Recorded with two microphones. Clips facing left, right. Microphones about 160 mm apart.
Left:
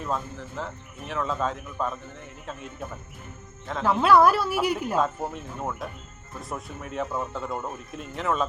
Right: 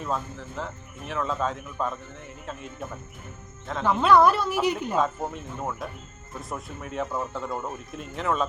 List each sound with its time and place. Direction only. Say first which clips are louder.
0.0 s speech: even; centre (ahead or behind)